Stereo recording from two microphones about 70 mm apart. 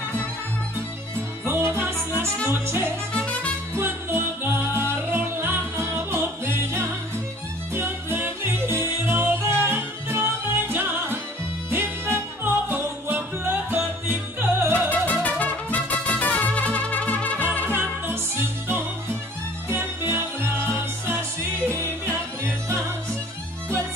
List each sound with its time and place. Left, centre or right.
1.4 s music: right
3.1 s music: centre
3.7 s music: right
7.7 s music: right
14.9 s music: left
17.6 s music: right